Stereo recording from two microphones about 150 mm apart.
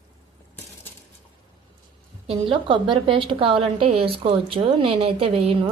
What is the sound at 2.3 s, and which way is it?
A woman's voice, 35° right (ahead or behind).